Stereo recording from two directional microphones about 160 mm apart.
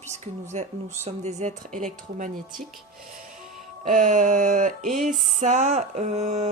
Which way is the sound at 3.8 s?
50° right (ahead or behind).